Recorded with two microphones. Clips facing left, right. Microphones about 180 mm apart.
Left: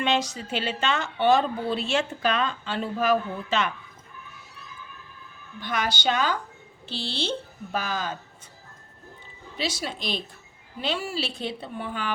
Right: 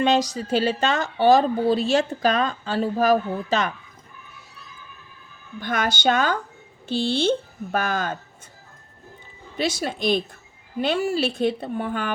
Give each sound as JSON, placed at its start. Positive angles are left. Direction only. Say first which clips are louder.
{"t": 0.0, "sound": "a woman's voice", "louder": "right 5 dB", "side_deg": -40}
{"t": 5.5, "sound": "a woman's voice", "louder": "right 4 dB", "side_deg": -50}
{"t": 9.6, "sound": "a woman's voice", "louder": "right 6 dB", "side_deg": -50}